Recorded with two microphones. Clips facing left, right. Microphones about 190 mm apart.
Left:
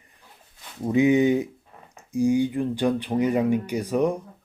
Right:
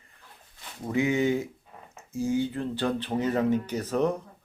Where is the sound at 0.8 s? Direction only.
20° left (ahead or behind).